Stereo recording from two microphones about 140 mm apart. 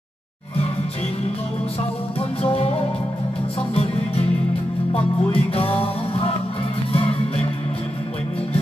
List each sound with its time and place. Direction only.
2.1 s music: 45° left (ahead or behind)